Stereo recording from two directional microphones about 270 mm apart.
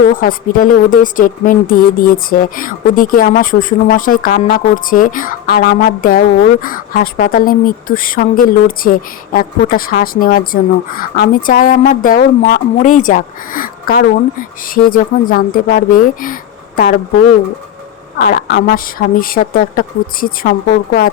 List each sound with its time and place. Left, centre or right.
0.2 s speech: left
18.2 s speech: left